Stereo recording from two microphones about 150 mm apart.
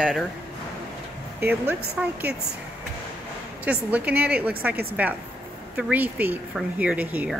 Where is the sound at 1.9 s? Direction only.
5° right (ahead or behind).